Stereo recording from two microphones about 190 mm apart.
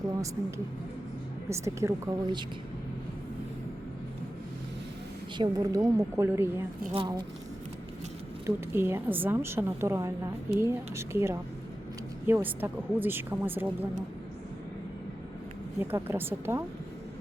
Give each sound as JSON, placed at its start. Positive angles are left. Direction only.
{"t": 1.5, "sound": "a woman's voice", "side_deg": -15}
{"t": 5.4, "sound": "a woman's voice", "side_deg": -20}
{"t": 6.9, "sound": "a woman's voice", "side_deg": -25}
{"t": 8.4, "sound": "a woman's voice", "side_deg": -10}
{"t": 15.8, "sound": "a woman's voice", "side_deg": -10}